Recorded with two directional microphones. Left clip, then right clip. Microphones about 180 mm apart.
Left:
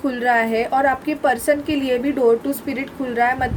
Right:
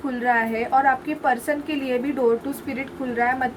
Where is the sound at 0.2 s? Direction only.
45° left (ahead or behind).